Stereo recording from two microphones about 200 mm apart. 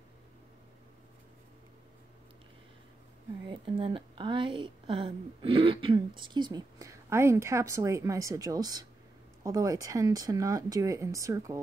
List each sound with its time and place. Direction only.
3.4 s speech: 25° right (ahead or behind)